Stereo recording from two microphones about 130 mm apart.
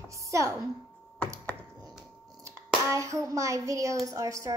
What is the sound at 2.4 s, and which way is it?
Speech, 25° right (ahead or behind).